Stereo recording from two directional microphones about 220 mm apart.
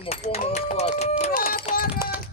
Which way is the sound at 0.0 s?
30° left (ahead or behind).